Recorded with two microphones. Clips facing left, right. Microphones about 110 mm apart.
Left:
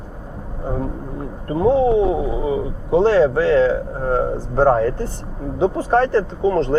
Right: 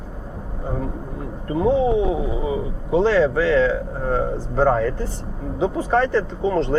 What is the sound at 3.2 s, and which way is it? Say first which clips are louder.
Speech: left 3 dB; 30° left (ahead or behind).